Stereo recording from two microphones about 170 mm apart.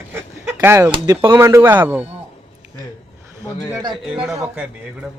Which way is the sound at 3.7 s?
25° right (ahead or behind).